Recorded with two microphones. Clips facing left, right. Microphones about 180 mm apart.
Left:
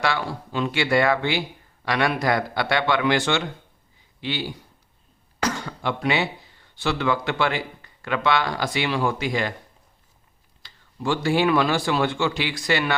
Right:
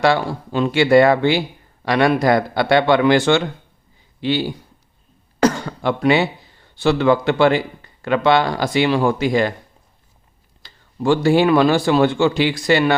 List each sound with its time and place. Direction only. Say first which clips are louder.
0.0 s speech: right 8 dB; 30° right (ahead or behind)
5.5 s a sound: right 2 dB; 45° right (ahead or behind)
6.7 s speech: right 8 dB; 30° right (ahead or behind)
10.6 s speech: right 7 dB; 35° right (ahead or behind)